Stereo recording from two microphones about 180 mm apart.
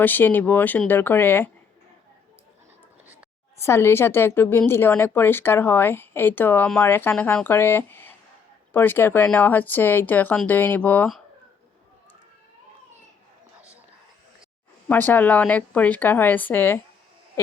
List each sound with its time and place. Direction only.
0.0 s a woman's voice: 10° left (ahead or behind)
3.6 s a woman's voice: 15° left (ahead or behind)
14.8 s a woman's voice: 10° left (ahead or behind)
17.4 s a sound: 15° left (ahead or behind)